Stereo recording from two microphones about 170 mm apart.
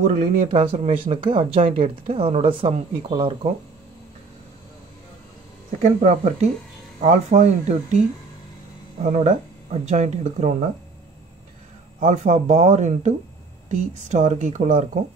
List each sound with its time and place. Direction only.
0.0 s speech: 50° right (ahead or behind)
0.5 s speech: 35° right (ahead or behind)
5.8 s speech: 45° right (ahead or behind)
9.0 s speech: 45° right (ahead or behind)
12.0 s speech: 45° right (ahead or behind)